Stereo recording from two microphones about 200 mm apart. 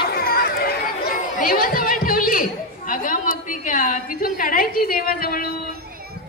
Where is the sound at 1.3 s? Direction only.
45° left (ahead or behind).